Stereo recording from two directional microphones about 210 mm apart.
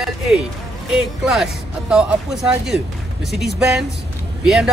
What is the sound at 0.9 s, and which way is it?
Speech, 5° right (ahead or behind).